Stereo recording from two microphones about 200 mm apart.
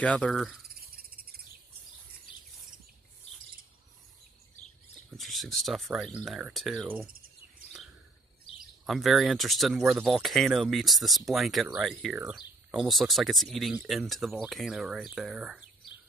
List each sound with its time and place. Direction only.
0.0 s speech: 5° left (ahead or behind)
0.7 s cricket: 50° right (ahead or behind)
5.1 s speech: centre (ahead or behind)
8.8 s speech: centre (ahead or behind)